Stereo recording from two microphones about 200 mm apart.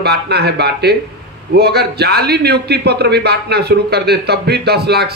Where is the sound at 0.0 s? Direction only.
55° right (ahead or behind).